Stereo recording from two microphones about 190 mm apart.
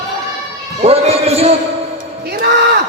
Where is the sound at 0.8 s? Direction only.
30° right (ahead or behind).